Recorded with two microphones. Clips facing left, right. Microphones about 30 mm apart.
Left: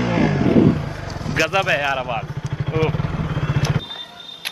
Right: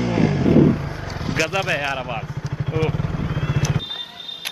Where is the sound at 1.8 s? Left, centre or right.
Centre.